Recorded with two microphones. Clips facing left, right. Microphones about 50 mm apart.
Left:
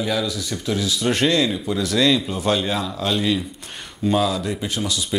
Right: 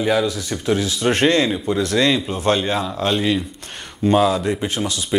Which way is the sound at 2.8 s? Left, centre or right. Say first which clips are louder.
Right 3 dB; right.